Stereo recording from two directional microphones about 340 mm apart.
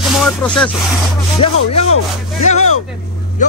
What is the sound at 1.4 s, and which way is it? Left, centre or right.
Rub, centre.